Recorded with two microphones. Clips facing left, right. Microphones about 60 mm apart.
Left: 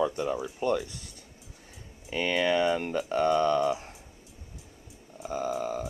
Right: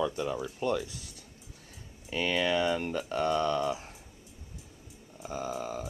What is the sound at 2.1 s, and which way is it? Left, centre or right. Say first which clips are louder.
Speech: left 2 dB; centre.